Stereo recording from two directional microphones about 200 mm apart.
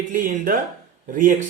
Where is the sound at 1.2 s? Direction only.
40° right (ahead or behind).